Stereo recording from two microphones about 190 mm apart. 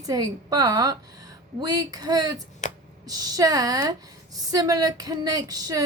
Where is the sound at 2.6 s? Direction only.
40° left (ahead or behind).